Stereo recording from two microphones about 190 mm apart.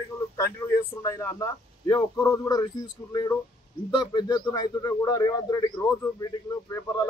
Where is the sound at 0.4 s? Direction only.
15° left (ahead or behind).